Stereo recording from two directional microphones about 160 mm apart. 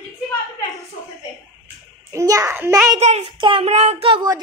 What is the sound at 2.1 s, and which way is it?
Speech, 20° right (ahead or behind).